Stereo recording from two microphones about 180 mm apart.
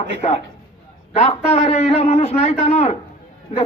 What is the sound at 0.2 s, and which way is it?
A man's voice, 35° left (ahead or behind).